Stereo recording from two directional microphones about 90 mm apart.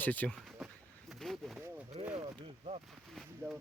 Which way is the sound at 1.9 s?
90° right.